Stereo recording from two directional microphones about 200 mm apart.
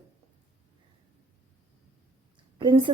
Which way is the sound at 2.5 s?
25° right (ahead or behind).